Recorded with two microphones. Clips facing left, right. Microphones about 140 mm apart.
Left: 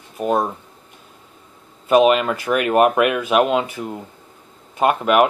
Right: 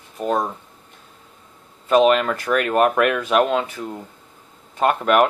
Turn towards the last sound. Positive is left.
turn(degrees=5)  # may be behind; listen again after turning